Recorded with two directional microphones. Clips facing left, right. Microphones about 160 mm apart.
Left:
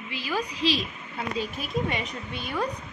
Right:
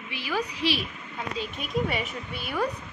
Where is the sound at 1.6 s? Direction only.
5° right (ahead or behind).